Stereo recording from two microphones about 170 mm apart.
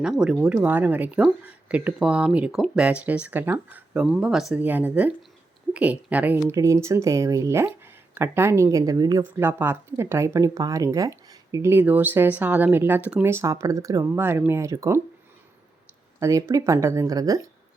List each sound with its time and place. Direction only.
0.0 s speech: 5° right (ahead or behind)
16.2 s speech: 15° right (ahead or behind)